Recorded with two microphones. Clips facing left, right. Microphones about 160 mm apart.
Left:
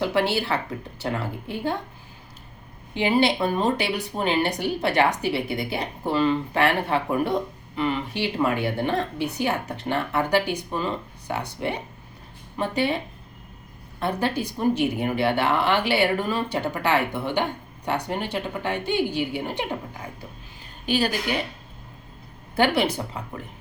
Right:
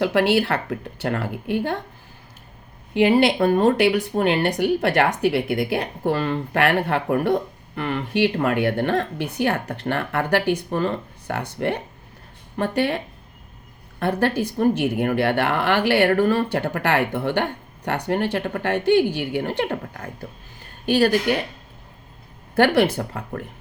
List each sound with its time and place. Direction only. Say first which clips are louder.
0.0 s speech: right 5 dB; 65° right (ahead or behind)
2.9 s speech: right 4 dB; 55° right (ahead or behind)
14.0 s speech: right 4 dB; 60° right (ahead or behind)
22.5 s speech: right 4 dB; 55° right (ahead or behind)